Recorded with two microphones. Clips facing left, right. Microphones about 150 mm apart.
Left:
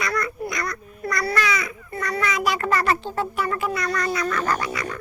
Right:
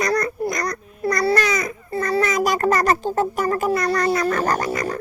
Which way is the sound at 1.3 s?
45° right (ahead or behind).